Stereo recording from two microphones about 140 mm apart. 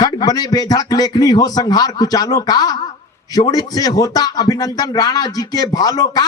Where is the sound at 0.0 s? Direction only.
30° left (ahead or behind).